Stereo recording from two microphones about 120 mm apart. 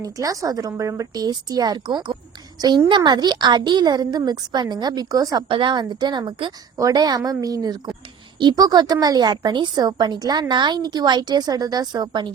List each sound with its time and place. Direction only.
0.0 s a woman's voice: 30° right (ahead or behind)